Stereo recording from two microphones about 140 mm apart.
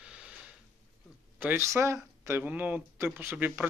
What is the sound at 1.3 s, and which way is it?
Speech, 15° right (ahead or behind).